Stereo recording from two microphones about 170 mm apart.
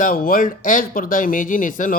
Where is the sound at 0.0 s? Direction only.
55° left (ahead or behind).